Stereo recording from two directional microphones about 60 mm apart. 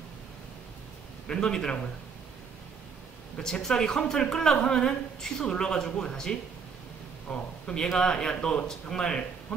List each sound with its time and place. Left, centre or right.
1.2 s a woman's voice: centre
3.3 s a woman's voice: centre
7.2 s a sound: left
7.7 s a woman's voice: centre